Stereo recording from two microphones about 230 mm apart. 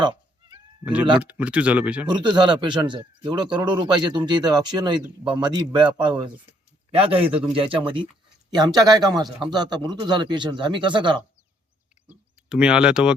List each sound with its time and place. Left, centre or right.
1.2 s speech: centre
2.0 s speech: centre
12.0 s speech: centre